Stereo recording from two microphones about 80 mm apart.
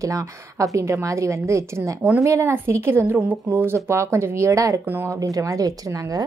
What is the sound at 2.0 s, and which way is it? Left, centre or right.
Speech, centre.